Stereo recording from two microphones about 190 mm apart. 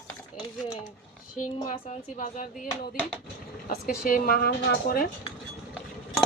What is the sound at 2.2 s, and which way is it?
Speech, 45° left (ahead or behind).